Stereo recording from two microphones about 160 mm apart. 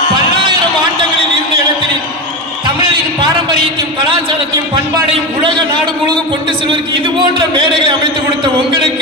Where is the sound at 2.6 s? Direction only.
30° right (ahead or behind).